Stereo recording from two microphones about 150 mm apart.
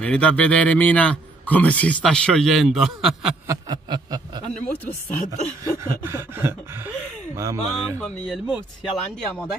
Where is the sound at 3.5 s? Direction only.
25° right (ahead or behind).